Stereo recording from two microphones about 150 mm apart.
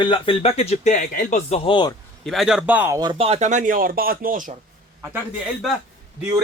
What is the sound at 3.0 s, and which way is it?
Speech, 35° right (ahead or behind).